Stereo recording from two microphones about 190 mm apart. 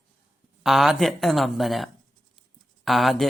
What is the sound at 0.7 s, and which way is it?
Speech, centre (ahead or behind).